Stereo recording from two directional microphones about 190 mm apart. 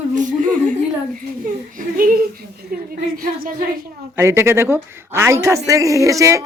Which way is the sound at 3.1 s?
50° right (ahead or behind).